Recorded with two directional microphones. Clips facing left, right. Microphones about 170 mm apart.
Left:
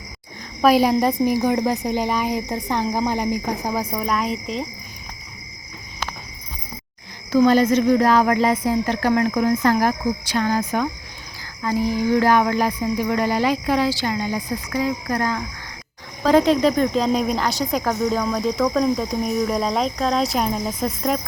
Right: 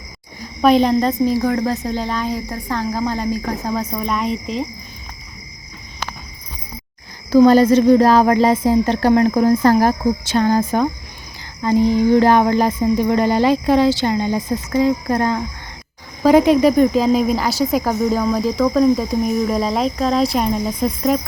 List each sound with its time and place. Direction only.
0.6 s cricket: 5° left (ahead or behind)
7.3 s speech: 35° right (ahead or behind)
11.6 s music: 25° right (ahead or behind)
16.2 s speech: 10° right (ahead or behind)